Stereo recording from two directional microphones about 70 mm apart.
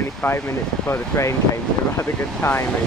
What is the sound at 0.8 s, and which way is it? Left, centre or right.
Speech, left.